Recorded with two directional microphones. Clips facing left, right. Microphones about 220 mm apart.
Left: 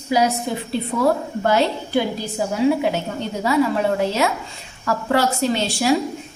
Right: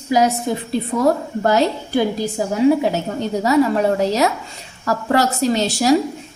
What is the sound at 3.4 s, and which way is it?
A woman's voice, 40° right (ahead or behind).